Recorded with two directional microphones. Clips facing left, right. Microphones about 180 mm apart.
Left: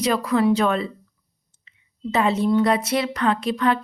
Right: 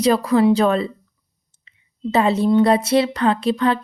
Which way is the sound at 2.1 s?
30° right (ahead or behind).